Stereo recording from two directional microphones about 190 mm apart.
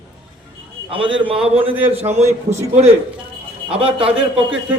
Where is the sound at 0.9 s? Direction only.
25° right (ahead or behind).